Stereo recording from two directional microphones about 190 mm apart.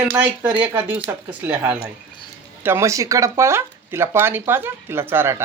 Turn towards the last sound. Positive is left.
turn(degrees=-10)  # may be behind; listen again after turning